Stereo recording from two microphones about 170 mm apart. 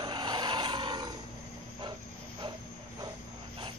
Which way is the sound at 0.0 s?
25° right (ahead or behind).